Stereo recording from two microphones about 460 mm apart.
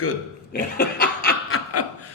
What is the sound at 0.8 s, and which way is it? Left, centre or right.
Snicker, left.